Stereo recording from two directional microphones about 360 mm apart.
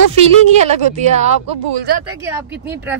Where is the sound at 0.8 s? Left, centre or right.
Centre.